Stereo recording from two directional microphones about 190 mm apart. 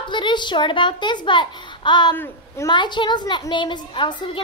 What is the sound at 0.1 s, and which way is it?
A woman's voice, 25° left (ahead or behind).